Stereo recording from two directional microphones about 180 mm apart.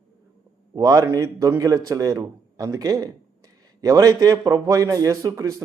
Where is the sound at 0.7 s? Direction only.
20° right (ahead or behind).